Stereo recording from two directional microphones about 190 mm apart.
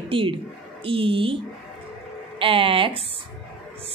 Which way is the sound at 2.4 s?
30° right (ahead or behind).